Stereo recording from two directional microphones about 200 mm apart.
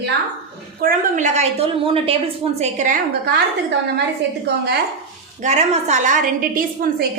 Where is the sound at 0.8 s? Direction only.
45° right (ahead or behind).